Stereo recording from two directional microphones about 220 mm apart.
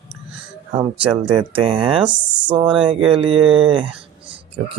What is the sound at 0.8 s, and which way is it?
Speech, 25° right (ahead or behind).